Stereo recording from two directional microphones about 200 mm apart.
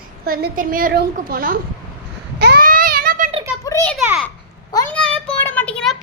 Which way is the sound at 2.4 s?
50° right (ahead or behind).